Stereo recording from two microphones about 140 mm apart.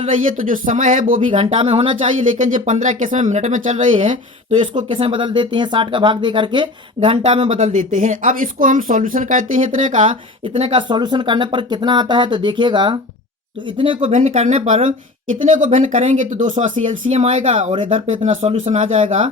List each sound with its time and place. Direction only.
0.3 s speech: 75° right (ahead or behind)
1.3 s speech: 40° right (ahead or behind)
2.2 s speech: 70° right (ahead or behind)
4.6 s speech: 35° right (ahead or behind); by 10.0 s 65° right (ahead or behind)
10.5 s speech: 40° right (ahead or behind)
14.1 s speech: 55° right (ahead or behind)